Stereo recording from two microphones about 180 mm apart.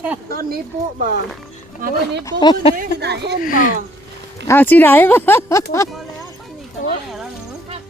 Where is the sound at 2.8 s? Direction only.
65° right (ahead or behind).